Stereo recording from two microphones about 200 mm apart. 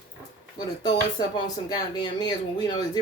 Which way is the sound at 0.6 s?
20° left (ahead or behind).